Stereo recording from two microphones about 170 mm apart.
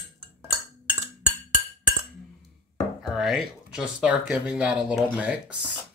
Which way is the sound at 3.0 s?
5° right (ahead or behind).